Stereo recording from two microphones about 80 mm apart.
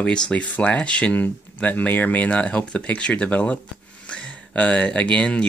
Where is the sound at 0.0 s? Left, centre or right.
Centre.